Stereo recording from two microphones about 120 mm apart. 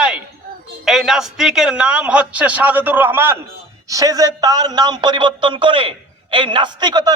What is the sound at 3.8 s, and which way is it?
A man's voice, 30° right (ahead or behind).